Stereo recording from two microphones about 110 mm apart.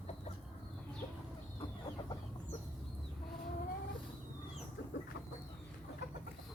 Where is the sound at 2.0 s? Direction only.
45° left (ahead or behind).